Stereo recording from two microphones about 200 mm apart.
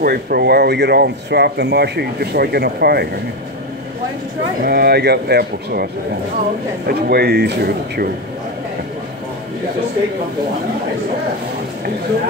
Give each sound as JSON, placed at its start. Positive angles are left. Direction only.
{"t": 0.0, "sound": "speech", "side_deg": -50}
{"t": 4.6, "sound": "speech", "side_deg": -50}
{"t": 6.9, "sound": "speech", "side_deg": -50}